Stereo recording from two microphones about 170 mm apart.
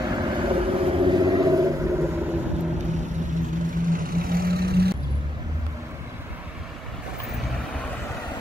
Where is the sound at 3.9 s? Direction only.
55° right (ahead or behind).